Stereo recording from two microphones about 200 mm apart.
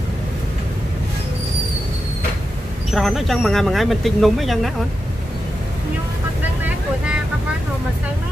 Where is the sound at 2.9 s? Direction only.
Centre (ahead or behind).